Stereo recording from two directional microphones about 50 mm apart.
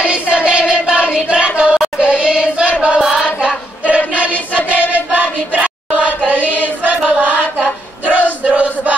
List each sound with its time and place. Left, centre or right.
0.0 s child singing: right
3.9 s choir: right
4.9 s chant: right
6.8 s music: right
8.1 s battle cry: right